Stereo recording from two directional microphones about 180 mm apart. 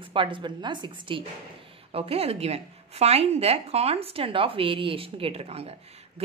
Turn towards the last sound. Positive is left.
turn(degrees=-35)  # may be behind; listen again after turning